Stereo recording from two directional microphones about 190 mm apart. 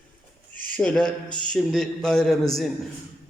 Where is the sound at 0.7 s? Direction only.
5° left (ahead or behind).